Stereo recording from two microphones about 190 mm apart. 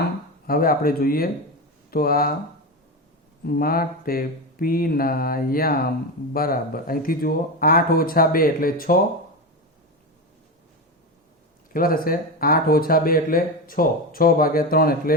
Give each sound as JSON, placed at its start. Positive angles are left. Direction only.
{"t": 0.4, "sound": "speech", "side_deg": 50}
{"t": 3.4, "sound": "speech", "side_deg": 50}
{"t": 11.7, "sound": "speech", "side_deg": 50}